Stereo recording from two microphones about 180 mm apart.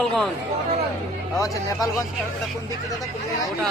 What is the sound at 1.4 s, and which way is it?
Speech, 20° left (ahead or behind).